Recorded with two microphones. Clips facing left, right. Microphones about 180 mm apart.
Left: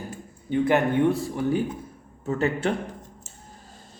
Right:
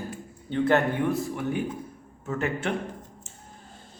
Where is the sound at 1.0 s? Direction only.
30° left (ahead or behind).